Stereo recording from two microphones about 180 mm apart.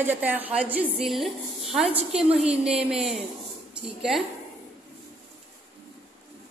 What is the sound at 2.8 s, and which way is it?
A woman's voice, 5° right (ahead or behind).